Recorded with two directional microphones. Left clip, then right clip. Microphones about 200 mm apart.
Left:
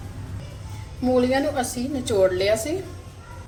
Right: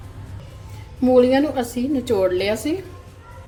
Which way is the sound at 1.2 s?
50° right (ahead or behind).